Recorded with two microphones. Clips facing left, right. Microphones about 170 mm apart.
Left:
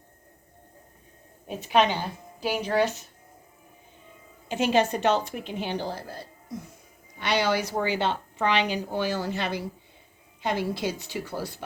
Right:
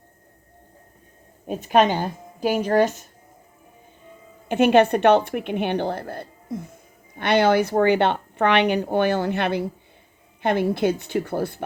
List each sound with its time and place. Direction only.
1.5 s a woman's voice: 45° right (ahead or behind)
4.4 s a woman's voice: 60° right (ahead or behind)